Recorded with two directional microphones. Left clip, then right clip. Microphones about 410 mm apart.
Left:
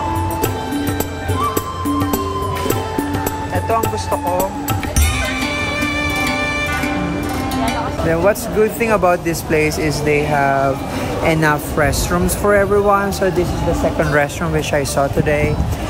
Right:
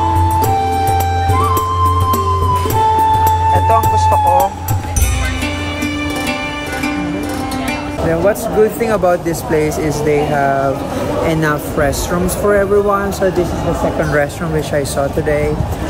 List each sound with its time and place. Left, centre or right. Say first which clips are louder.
8.1 s speech: right 2 dB; centre